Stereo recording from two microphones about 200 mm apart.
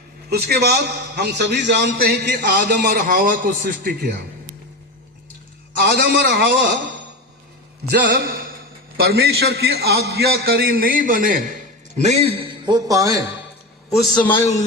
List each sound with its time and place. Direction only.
0.3 s a man's voice: 55° right (ahead or behind)
5.8 s a man's voice: 55° right (ahead or behind)
7.9 s a man's voice: 50° right (ahead or behind); by 13.3 s 15° right (ahead or behind)
13.9 s a man's voice: centre (ahead or behind)